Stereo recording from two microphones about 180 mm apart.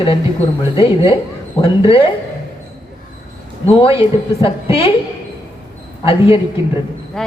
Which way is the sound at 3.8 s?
30° left (ahead or behind).